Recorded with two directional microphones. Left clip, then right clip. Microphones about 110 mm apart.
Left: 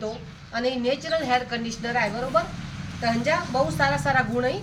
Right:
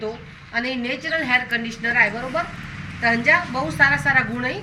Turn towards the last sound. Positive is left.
turn(degrees=45)  # may be behind; listen again after turning